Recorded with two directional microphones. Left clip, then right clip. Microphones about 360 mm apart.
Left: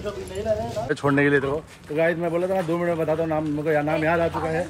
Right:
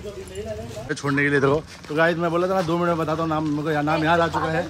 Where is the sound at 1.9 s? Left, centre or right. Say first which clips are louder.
Right 2 dB; centre.